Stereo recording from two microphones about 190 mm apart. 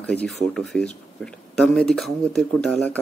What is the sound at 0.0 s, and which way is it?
Speech, 5° left (ahead or behind).